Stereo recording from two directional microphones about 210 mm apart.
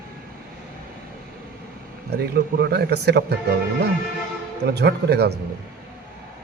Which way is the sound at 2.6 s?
50° right (ahead or behind).